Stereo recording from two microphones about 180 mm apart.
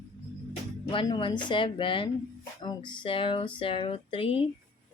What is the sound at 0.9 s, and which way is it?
Speech, 30° left (ahead or behind).